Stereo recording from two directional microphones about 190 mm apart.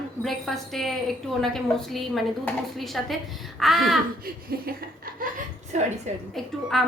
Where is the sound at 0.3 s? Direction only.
Centre (ahead or behind).